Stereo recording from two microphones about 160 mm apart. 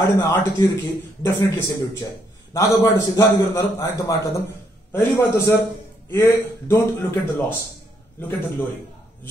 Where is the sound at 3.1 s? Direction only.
20° left (ahead or behind).